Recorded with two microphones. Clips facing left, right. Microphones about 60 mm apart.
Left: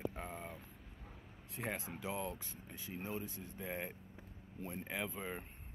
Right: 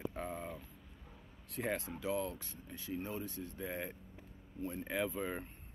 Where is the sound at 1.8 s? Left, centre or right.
Left.